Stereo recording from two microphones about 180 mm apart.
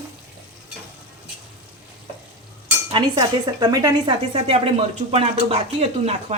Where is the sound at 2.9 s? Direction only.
25° right (ahead or behind).